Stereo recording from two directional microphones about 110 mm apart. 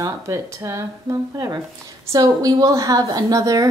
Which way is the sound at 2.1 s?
35° right (ahead or behind).